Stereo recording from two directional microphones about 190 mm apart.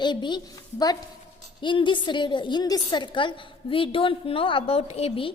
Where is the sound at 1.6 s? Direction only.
25° left (ahead or behind).